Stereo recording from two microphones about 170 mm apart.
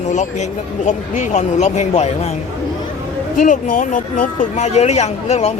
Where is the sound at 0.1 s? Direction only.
45° left (ahead or behind).